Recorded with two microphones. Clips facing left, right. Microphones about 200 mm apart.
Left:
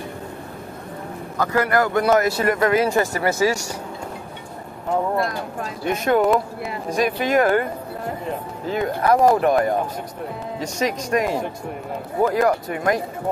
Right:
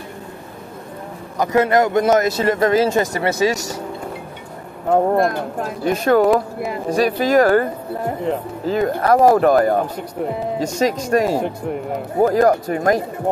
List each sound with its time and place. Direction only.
1.4 s speech: 20° right (ahead or behind)
4.8 s speech: 55° right (ahead or behind)
5.9 s speech: 35° right (ahead or behind)
8.6 s speech: 45° right (ahead or behind)
10.8 s speech: 40° right (ahead or behind)